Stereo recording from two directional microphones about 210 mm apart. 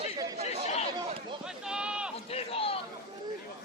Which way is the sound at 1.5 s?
5° right (ahead or behind).